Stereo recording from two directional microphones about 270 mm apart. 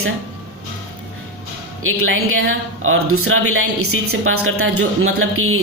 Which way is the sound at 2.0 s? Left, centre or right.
Right.